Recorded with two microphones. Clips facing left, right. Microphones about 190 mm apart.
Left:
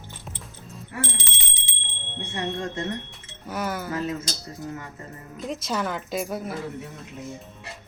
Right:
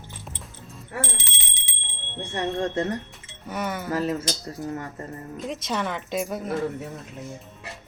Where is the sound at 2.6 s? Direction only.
35° right (ahead or behind).